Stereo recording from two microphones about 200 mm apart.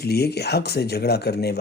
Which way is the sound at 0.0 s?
55° left (ahead or behind).